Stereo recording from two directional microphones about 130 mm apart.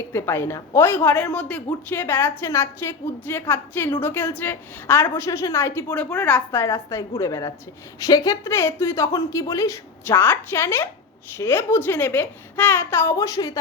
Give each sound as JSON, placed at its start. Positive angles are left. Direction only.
{"t": 0.1, "sound": "a woman's voice", "side_deg": 20}